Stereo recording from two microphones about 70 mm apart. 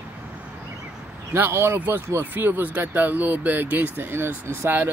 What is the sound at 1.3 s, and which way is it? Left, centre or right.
Speech, right.